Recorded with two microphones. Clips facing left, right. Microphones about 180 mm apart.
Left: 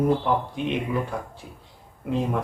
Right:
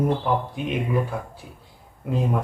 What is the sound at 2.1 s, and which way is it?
Speech, centre (ahead or behind).